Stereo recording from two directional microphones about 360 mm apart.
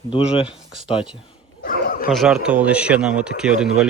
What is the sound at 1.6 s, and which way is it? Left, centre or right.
Bow-wow, left.